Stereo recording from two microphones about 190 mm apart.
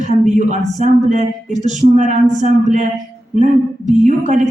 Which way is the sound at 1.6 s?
40° right (ahead or behind).